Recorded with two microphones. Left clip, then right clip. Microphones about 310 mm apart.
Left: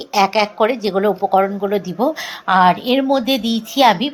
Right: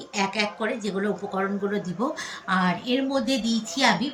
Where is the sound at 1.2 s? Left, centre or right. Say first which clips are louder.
Left 16 dB; left.